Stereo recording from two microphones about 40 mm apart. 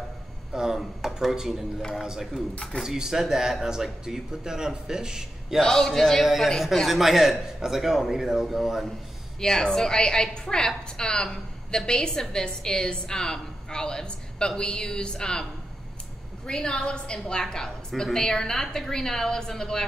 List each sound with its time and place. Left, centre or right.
0.5 s a sound: centre
0.7 s a sound: centre
1.3 s speech: centre
5.6 s a woman's voice: centre
6.2 s a man's voice: centre
9.4 s a woman's voice: centre
16.4 s a woman's voice: left